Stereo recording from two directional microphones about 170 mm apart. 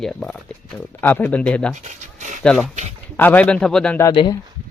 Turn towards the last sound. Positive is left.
turn(degrees=30)  # may be behind; listen again after turning